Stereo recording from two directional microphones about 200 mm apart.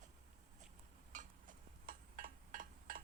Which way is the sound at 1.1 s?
40° right (ahead or behind).